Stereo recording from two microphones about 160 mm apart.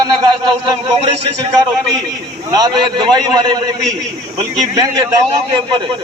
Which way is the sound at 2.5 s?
25° right (ahead or behind).